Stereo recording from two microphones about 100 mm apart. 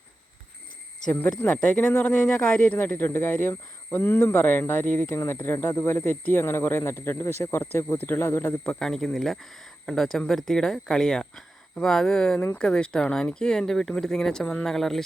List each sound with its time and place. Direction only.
1.4 s speech: 15° left (ahead or behind)
8.6 s speech: 5° left (ahead or behind)